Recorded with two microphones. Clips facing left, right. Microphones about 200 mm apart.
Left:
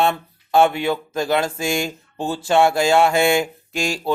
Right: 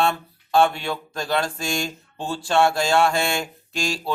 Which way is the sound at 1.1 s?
5° left (ahead or behind).